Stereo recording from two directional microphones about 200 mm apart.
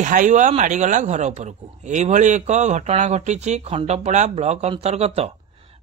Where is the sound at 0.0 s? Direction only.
40° right (ahead or behind).